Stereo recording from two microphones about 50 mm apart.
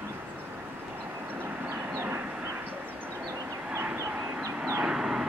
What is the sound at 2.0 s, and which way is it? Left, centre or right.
Vehicle, right.